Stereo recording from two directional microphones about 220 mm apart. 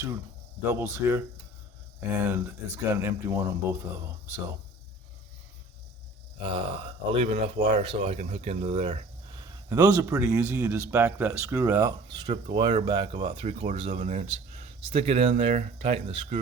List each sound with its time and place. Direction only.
0.7 s speech: 10° right (ahead or behind)
6.4 s speech: 25° right (ahead or behind)
9.6 s speech: 15° right (ahead or behind)